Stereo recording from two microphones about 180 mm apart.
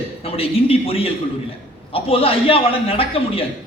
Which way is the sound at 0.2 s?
30° left (ahead or behind).